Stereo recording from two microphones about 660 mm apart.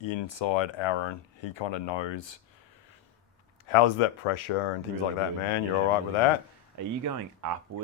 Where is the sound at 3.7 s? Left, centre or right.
Left.